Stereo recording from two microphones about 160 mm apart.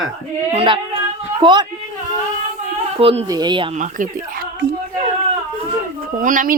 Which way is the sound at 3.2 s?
25° right (ahead or behind).